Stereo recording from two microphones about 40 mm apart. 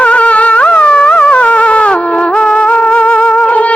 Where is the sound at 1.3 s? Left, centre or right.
Left.